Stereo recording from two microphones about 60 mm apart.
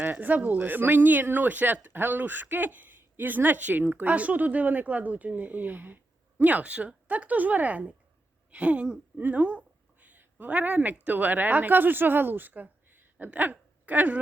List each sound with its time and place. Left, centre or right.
0.0 s speech: right
9.2 s a sound: right
11.0 s a woman's voice: right